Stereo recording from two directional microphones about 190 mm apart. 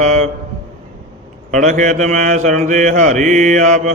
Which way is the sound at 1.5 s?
40° right (ahead or behind).